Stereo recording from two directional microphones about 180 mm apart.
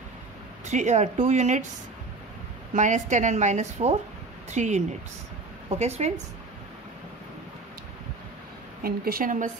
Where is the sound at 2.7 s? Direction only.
45° right (ahead or behind).